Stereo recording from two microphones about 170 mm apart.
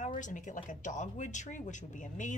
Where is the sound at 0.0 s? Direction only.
50° left (ahead or behind).